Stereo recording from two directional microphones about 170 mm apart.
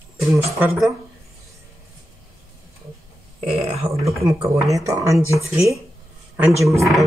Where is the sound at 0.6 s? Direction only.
5° right (ahead or behind).